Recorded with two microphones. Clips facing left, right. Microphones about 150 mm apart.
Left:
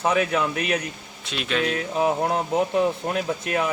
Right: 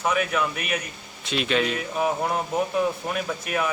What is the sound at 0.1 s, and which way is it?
Speech, 30° left (ahead or behind).